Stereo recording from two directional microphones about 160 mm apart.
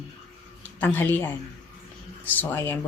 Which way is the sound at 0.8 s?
10° left (ahead or behind).